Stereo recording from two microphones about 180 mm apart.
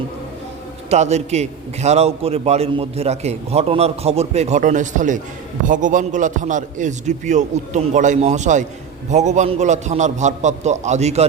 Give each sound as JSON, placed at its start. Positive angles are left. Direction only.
{"t": 0.9, "sound": "a man's voice", "side_deg": -40}